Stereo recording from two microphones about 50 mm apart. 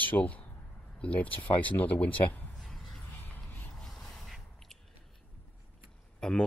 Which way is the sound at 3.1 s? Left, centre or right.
Left.